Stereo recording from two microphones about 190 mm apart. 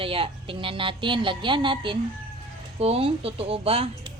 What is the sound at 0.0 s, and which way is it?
A woman's voice, 30° right (ahead or behind).